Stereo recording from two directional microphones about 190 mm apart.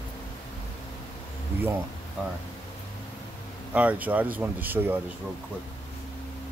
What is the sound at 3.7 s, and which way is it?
Speech, 5° right (ahead or behind).